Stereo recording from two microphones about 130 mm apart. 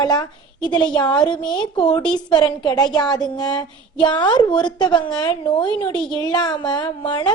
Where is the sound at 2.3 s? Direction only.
30° left (ahead or behind).